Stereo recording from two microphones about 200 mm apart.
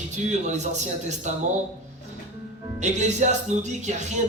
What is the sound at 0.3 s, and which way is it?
Speech, 35° right (ahead or behind).